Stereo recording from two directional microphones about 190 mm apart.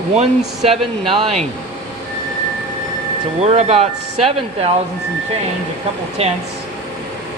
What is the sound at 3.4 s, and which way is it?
Speech, 35° right (ahead or behind).